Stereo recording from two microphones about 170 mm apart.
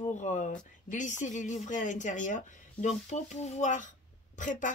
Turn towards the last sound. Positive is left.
turn(degrees=50)  # may be behind; listen again after turning